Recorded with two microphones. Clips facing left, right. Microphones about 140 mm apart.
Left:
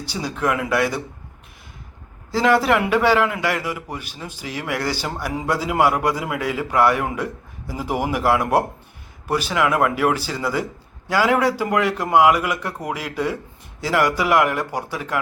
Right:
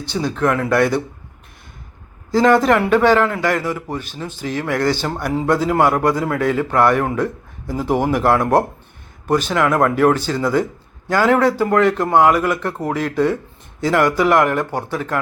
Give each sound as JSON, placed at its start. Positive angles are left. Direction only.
{"t": 0.0, "sound": "a man's voice", "side_deg": 10}
{"t": 2.3, "sound": "a man's voice", "side_deg": 5}
{"t": 12.4, "sound": "speech", "side_deg": -40}
{"t": 12.9, "sound": "a man's voice", "side_deg": 10}